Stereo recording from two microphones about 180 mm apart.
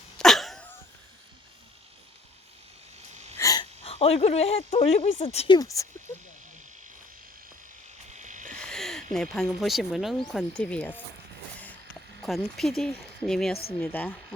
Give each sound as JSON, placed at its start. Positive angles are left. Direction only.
{"t": 0.2, "sound": "cough", "side_deg": 0}
{"t": 3.3, "sound": "wheeze", "side_deg": 20}
{"t": 3.8, "sound": "speech", "side_deg": 35}
{"t": 5.5, "sound": "speech", "side_deg": 20}
{"t": 8.1, "sound": "a sound", "side_deg": -45}
{"t": 8.5, "sound": "a sound", "side_deg": 5}
{"t": 9.1, "sound": "speech", "side_deg": 5}
{"t": 12.2, "sound": "a woman's voice", "side_deg": 0}